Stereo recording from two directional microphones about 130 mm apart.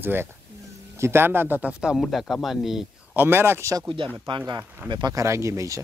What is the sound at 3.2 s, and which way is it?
Speech, 15° right (ahead or behind).